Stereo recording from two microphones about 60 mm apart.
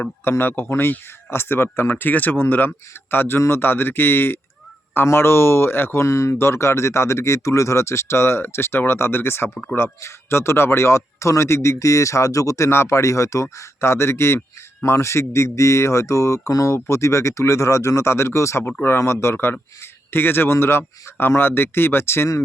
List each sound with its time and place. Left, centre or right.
0.0 s speech: left
6.1 s speech: left
16.7 s speech: left